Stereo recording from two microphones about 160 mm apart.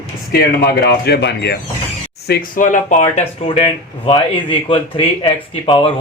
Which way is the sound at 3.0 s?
35° left (ahead or behind).